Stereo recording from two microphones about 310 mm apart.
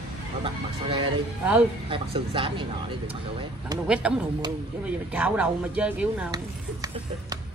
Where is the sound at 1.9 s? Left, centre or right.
Centre.